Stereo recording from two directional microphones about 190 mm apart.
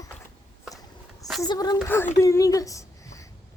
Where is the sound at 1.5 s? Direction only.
20° left (ahead or behind).